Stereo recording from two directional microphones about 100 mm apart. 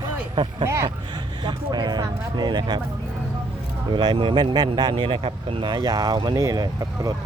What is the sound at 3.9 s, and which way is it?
Speech, 50° right (ahead or behind).